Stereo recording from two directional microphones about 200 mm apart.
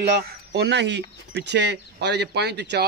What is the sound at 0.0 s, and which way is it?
Speech, 55° right (ahead or behind).